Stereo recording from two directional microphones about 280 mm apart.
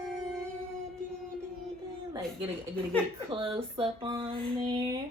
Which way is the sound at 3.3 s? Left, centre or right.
Centre.